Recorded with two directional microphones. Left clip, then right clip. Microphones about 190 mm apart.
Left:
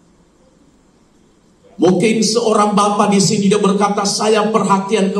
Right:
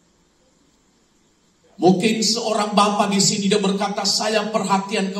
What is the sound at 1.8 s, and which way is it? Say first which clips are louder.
A man's voice: left 4 dB; 25° right (ahead or behind).